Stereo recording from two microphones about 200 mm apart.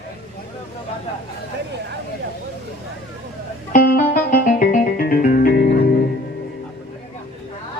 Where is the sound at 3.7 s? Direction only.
45° left (ahead or behind).